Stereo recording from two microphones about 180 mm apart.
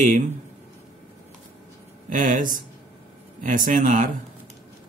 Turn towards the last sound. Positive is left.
turn(degrees=-45)  # may be behind; listen again after turning